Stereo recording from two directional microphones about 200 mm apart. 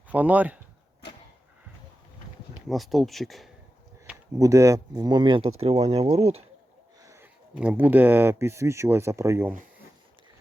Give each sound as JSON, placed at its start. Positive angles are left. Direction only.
{"t": 0.1, "sound": "speech", "side_deg": -10}
{"t": 2.6, "sound": "speech", "side_deg": 0}
{"t": 4.0, "sound": "speech", "side_deg": -15}
{"t": 7.0, "sound": "a sound", "side_deg": -15}
{"t": 7.5, "sound": "speech", "side_deg": -5}